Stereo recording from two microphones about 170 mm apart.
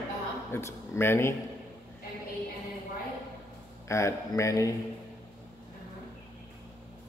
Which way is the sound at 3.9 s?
15° left (ahead or behind).